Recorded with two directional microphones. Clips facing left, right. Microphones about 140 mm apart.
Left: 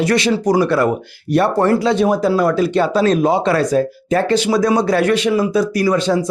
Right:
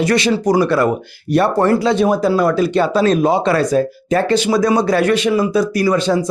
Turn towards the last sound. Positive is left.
turn(degrees=-15)  # may be behind; listen again after turning